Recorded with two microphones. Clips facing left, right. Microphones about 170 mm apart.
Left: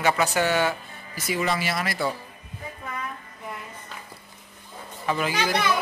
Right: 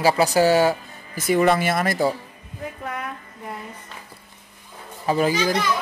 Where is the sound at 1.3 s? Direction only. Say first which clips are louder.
Right 8 dB; 55° right (ahead or behind).